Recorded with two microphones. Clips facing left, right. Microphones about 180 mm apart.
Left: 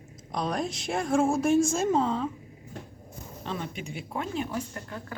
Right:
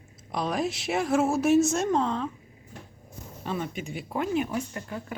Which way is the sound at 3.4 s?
5° right (ahead or behind).